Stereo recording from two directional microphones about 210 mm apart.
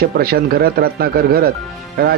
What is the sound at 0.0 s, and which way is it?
Speech, 45° right (ahead or behind).